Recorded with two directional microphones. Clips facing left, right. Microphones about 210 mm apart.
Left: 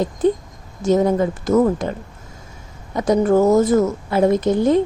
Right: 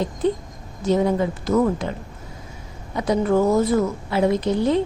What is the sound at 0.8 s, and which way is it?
A woman's voice, 45° left (ahead or behind).